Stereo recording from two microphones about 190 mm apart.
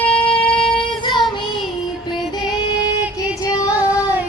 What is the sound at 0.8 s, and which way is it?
Child singing, 25° left (ahead or behind).